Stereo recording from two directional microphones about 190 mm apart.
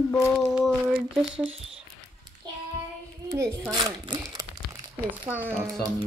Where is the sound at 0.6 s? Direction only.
5° right (ahead or behind).